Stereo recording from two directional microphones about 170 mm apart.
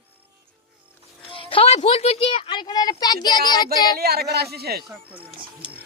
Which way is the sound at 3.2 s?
25° left (ahead or behind).